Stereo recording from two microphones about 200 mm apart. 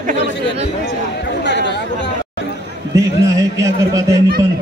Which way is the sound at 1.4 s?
60° left (ahead or behind).